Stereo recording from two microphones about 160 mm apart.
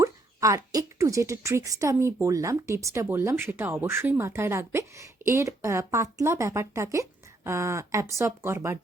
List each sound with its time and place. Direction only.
0.0 s speech: 20° right (ahead or behind)